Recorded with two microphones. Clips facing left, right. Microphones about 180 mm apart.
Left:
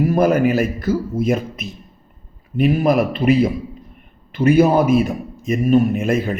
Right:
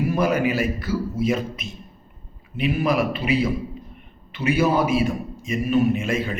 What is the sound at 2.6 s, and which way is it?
Speech, 45° left (ahead or behind).